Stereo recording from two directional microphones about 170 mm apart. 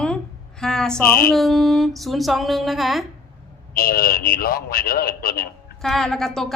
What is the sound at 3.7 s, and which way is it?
A man's voice, 60° left (ahead or behind).